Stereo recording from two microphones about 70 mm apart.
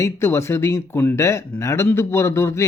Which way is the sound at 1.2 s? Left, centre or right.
Left.